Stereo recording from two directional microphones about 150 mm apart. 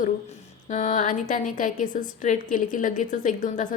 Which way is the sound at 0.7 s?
50° left (ahead or behind).